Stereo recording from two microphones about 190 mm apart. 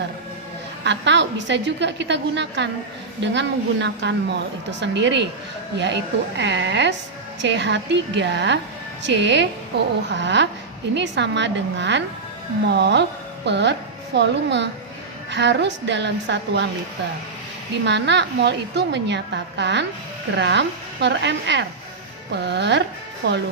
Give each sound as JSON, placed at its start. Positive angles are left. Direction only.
{"t": 0.9, "sound": "a woman's voice", "side_deg": -70}
{"t": 17.8, "sound": "a woman's voice", "side_deg": -65}